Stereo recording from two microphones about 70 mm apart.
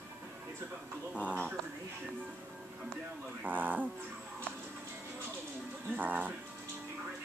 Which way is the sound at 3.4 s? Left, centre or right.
Right.